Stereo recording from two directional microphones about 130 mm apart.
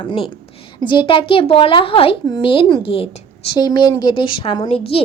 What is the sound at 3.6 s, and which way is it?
A woman's voice, 30° left (ahead or behind).